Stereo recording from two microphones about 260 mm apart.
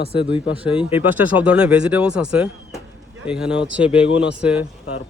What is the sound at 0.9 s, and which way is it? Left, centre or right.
Speech, centre.